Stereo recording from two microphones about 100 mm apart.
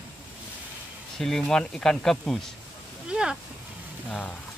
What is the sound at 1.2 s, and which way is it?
Speech, 5° left (ahead or behind).